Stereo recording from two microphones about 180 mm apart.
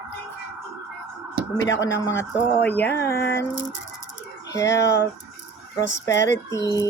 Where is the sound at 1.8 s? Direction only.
15° left (ahead or behind).